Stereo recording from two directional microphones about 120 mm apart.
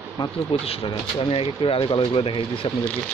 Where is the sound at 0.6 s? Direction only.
50° left (ahead or behind).